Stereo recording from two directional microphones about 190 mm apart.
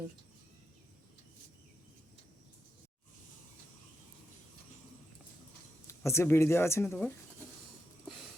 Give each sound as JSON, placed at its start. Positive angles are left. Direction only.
{"t": 5.9, "sound": "speech", "side_deg": 15}